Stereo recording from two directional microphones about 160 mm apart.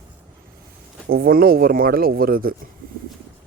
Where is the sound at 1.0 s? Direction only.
70° right (ahead or behind).